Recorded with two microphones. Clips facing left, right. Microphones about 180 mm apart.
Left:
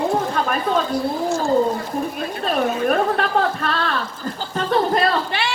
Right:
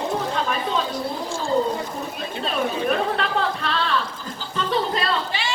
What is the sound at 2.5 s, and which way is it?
Speech, 45° left (ahead or behind).